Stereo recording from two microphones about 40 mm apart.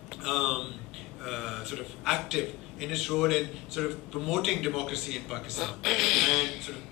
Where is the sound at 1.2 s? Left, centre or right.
Centre.